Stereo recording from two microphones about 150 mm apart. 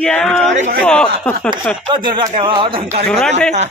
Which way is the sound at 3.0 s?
5° left (ahead or behind).